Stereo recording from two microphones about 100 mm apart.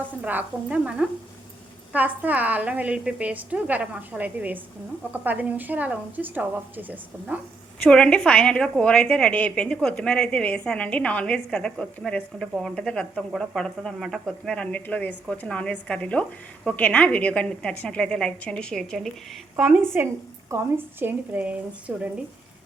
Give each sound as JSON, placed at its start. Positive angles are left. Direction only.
{"t": 0.3, "sound": "a woman's voice", "side_deg": -15}
{"t": 7.9, "sound": "speech", "side_deg": 10}
{"t": 19.5, "sound": "a woman's voice", "side_deg": -10}
{"t": 19.8, "sound": "a woman's voice", "side_deg": -20}